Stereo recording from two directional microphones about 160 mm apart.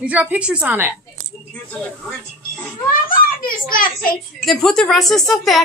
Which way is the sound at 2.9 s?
60° left (ahead or behind).